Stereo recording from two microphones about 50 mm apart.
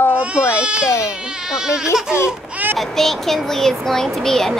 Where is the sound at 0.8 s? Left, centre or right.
Left.